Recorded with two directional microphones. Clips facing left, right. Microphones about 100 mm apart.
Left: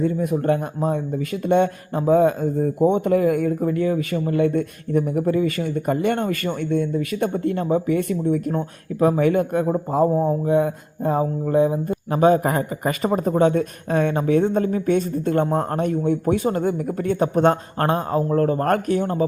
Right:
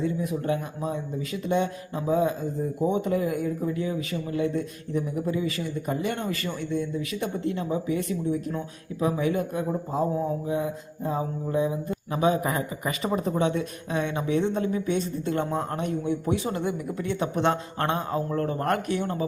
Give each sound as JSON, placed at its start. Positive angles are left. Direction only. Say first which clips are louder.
{"t": 0.0, "sound": "speech", "louder": "left 7 dB", "side_deg": 50}